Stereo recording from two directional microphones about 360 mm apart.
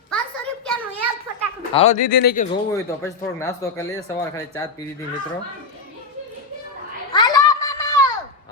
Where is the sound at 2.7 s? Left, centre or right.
Centre.